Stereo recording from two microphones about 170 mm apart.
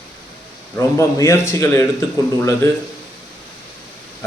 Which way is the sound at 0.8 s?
15° left (ahead or behind).